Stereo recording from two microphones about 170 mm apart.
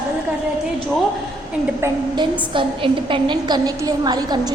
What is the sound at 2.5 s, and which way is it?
A woman's voice, 30° right (ahead or behind).